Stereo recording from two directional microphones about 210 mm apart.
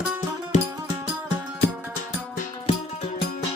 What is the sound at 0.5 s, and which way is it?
Music, 35° left (ahead or behind).